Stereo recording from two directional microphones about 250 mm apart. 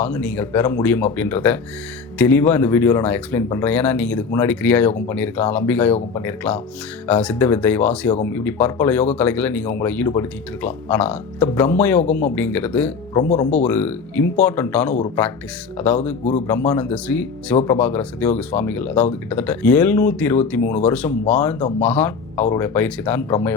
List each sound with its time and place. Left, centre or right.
0.0 s speech: centre
13.2 s speech: left
13.7 s speech: centre
16.5 s speech: centre